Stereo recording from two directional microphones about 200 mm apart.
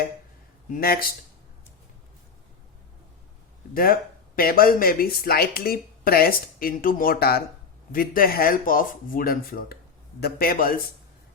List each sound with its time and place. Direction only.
0.7 s speech: 50° left (ahead or behind)
4.4 s speech: 45° left (ahead or behind)